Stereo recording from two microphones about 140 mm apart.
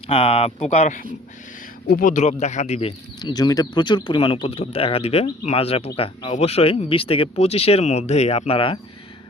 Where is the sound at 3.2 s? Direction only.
30° left (ahead or behind).